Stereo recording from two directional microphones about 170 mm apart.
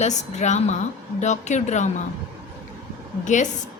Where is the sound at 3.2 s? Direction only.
45° left (ahead or behind).